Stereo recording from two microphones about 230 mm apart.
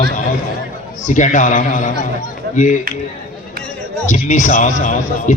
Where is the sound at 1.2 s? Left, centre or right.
Left.